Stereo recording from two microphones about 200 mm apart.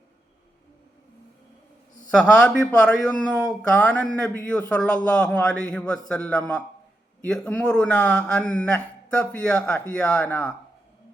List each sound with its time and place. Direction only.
2.0 s speech: 5° left (ahead or behind)